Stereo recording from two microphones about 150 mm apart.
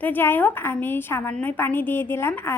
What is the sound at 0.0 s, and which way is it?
A woman's voice, 15° left (ahead or behind).